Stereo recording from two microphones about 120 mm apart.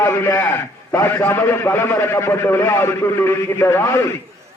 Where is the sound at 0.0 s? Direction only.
20° left (ahead or behind).